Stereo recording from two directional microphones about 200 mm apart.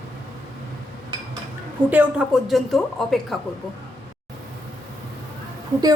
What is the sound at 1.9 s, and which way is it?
A woman's voice, 5° right (ahead or behind).